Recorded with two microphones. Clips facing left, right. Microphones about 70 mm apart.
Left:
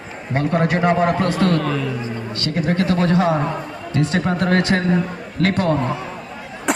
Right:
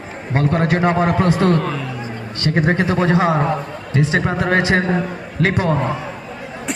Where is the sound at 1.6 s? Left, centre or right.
Right.